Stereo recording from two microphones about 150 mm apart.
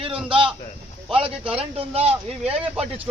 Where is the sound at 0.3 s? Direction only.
35° right (ahead or behind).